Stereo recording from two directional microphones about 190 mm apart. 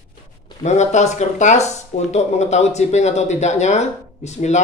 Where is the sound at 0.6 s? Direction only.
35° left (ahead or behind).